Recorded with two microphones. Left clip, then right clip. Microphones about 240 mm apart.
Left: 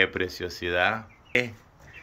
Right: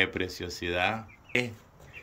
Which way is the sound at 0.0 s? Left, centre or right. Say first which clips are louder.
Left 4 dB; centre.